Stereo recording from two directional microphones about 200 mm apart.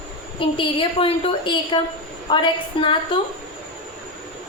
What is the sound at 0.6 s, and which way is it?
A woman's voice, 25° left (ahead or behind).